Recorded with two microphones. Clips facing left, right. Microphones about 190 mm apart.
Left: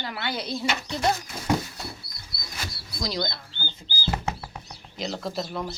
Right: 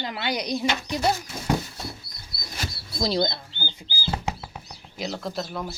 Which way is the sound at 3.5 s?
10° right (ahead or behind).